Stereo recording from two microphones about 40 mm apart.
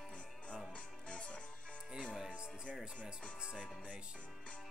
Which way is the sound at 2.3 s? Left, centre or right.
Right.